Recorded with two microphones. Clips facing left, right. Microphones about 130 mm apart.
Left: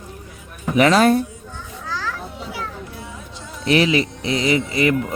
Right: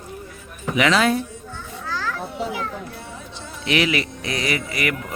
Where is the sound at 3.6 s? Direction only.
35° left (ahead or behind).